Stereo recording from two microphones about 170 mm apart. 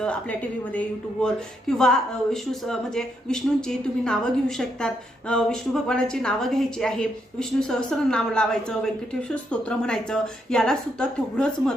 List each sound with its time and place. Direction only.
0.0 s a woman's voice: 5° left (ahead or behind)